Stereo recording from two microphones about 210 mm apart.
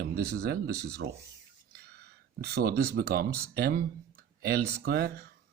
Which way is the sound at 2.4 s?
50° right (ahead or behind).